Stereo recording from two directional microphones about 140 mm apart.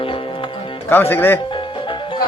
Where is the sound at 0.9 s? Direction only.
15° left (ahead or behind).